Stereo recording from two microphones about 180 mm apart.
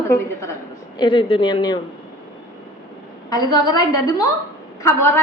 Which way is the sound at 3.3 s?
20° left (ahead or behind).